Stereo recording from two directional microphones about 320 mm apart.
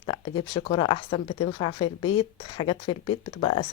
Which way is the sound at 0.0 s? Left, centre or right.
Centre.